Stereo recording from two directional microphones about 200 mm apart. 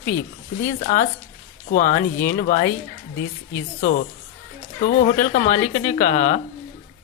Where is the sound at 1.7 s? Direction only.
45° left (ahead or behind).